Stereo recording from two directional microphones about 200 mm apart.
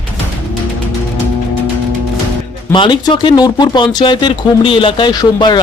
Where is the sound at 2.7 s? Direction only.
25° left (ahead or behind).